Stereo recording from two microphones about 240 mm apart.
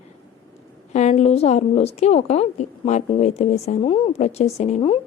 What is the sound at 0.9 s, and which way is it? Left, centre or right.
A woman's voice, left.